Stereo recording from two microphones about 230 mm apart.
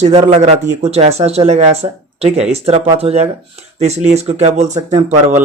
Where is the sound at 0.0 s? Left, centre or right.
Right.